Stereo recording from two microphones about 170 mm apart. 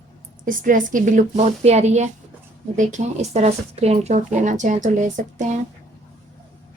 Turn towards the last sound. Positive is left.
turn(degrees=-45)  # may be behind; listen again after turning